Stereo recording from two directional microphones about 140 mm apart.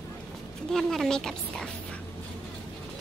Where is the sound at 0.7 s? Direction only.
5° left (ahead or behind).